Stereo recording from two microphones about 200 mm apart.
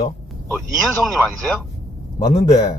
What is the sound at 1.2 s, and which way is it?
A man's voice, 10° left (ahead or behind).